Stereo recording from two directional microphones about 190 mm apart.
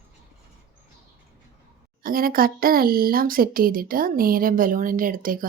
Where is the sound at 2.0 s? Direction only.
50° right (ahead or behind).